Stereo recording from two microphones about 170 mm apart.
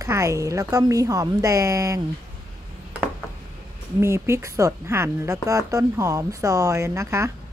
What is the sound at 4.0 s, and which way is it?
Speech, 15° right (ahead or behind).